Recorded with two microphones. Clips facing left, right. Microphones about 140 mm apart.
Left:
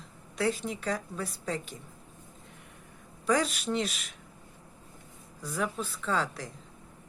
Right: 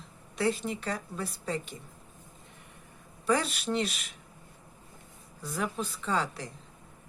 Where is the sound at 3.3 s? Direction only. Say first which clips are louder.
Left 1 dB; centre (ahead or behind).